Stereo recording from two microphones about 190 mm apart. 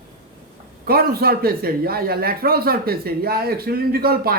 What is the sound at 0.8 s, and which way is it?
Speech, 55° right (ahead or behind).